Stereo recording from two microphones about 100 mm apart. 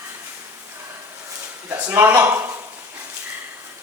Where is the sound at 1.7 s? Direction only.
20° right (ahead or behind).